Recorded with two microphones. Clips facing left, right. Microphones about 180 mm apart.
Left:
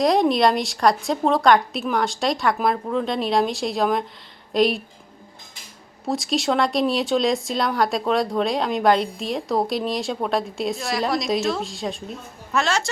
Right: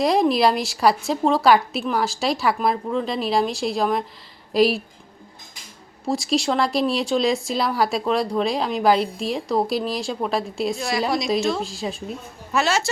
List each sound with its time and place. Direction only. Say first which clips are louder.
0.0 s speech: even; centre (ahead or behind)
6.1 s speech: right 1 dB; centre (ahead or behind)